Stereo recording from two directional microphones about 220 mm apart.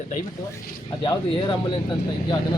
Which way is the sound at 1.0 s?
20° left (ahead or behind).